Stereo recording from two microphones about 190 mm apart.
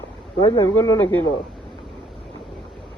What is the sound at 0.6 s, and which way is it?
Speech, 15° left (ahead or behind).